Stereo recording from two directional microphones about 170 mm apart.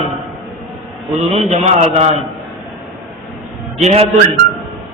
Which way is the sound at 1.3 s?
40° right (ahead or behind).